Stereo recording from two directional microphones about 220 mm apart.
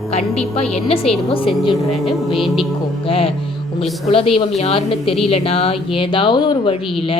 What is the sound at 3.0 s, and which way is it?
A woman's voice, 25° left (ahead or behind).